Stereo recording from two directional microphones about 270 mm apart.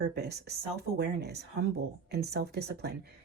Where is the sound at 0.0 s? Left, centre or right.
Right.